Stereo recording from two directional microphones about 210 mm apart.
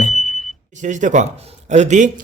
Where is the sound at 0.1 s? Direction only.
Centre (ahead or behind).